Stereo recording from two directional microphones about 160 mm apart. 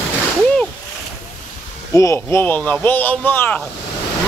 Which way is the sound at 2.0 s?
20° left (ahead or behind).